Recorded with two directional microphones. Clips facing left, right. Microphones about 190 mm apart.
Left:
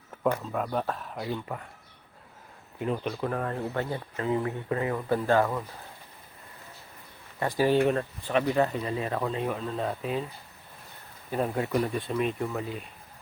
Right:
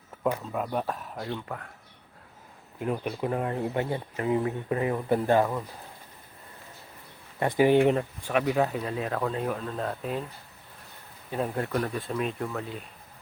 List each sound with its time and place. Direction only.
0.2 s speech: 5° right (ahead or behind)
1.2 s speech: 5° left (ahead or behind)
2.7 s speech: 5° right (ahead or behind)
7.3 s speech: 20° right (ahead or behind); by 10.2 s centre (ahead or behind)
11.3 s speech: centre (ahead or behind)